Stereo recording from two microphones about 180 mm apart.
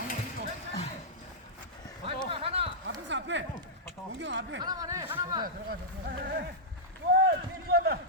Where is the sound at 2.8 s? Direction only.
90° right.